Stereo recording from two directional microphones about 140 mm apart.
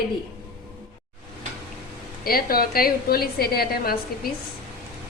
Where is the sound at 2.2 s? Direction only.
90° left.